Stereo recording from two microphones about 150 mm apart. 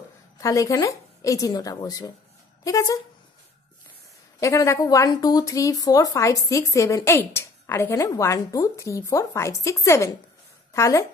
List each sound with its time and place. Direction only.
0.4 s speech: 20° left (ahead or behind)
4.4 s speech: 20° left (ahead or behind)